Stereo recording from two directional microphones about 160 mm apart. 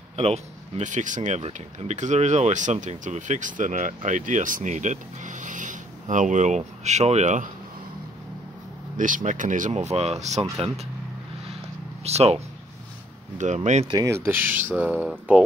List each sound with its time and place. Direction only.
0.1 s speech: 40° right (ahead or behind)
8.9 s speech: 55° right (ahead or behind)
12.0 s speech: 40° right (ahead or behind)
13.4 s speech: 50° right (ahead or behind)
13.8 s speech: 20° right (ahead or behind)